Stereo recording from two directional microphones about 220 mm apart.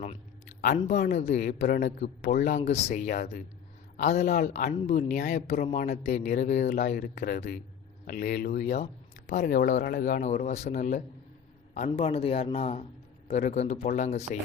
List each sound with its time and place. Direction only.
0.6 s a man's voice: 35° left (ahead or behind)